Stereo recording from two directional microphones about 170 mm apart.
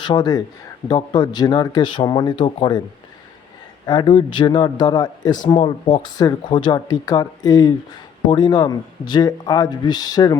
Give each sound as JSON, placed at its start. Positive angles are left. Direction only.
{"t": 0.0, "sound": "speech", "side_deg": 25}
{"t": 3.8, "sound": "speech", "side_deg": 25}